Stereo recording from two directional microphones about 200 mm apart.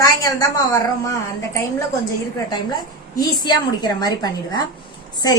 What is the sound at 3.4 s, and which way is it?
A woman's voice, 20° left (ahead or behind).